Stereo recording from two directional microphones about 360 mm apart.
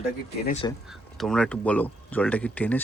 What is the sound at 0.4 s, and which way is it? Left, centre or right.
Speech, centre.